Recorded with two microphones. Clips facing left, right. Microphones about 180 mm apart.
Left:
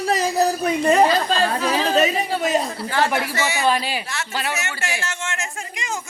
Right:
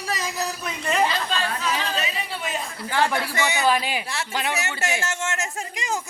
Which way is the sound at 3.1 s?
15° left (ahead or behind).